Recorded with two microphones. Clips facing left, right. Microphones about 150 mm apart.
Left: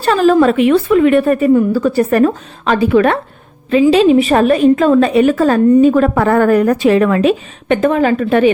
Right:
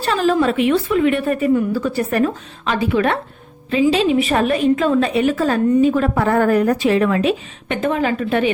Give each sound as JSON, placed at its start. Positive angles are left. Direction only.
{"t": 0.0, "sound": "a woman's voice", "side_deg": 50}
{"t": 4.0, "sound": "a woman's voice", "side_deg": 40}
{"t": 6.1, "sound": "a woman's voice", "side_deg": 70}